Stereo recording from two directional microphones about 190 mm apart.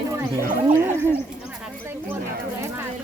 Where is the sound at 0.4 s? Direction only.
45° right (ahead or behind).